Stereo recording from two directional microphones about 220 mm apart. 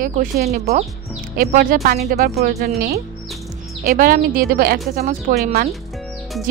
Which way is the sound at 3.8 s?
40° right (ahead or behind).